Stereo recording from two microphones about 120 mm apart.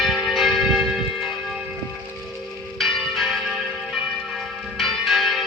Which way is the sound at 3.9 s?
Centre (ahead or behind).